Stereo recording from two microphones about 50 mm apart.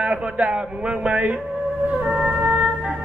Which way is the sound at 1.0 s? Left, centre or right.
Right.